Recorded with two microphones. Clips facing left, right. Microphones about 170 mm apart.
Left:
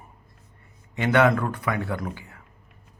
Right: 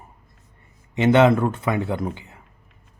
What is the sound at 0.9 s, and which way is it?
Speech, 20° right (ahead or behind).